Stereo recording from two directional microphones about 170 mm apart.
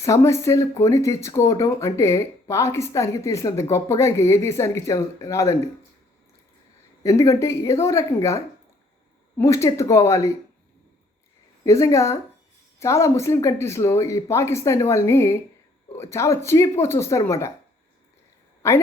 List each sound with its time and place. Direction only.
0.0 s speech: 15° left (ahead or behind)
7.0 s speech: 20° left (ahead or behind)
9.4 s speech: 15° left (ahead or behind)
11.6 s speech: 15° left (ahead or behind)
18.6 s speech: 15° left (ahead or behind)